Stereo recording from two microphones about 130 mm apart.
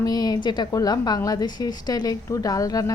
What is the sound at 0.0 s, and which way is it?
A woman's voice, 30° left (ahead or behind).